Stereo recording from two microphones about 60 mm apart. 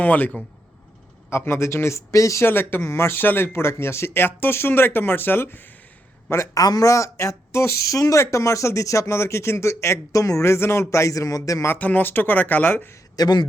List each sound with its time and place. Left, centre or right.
0.0 s speech: left
1.3 s speech: left
2.5 s speech: left
6.3 s speech: left
6.6 s speech: left
8.2 s speech: left
11.8 s speech: left
13.2 s a man's voice: left